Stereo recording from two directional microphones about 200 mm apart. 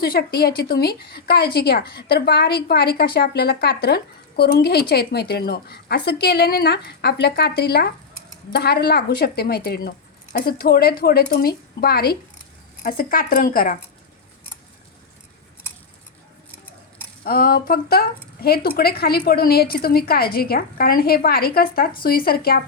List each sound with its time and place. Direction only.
0.0 s a woman's voice: 50° left (ahead or behind)
17.2 s a woman's voice: 45° left (ahead or behind)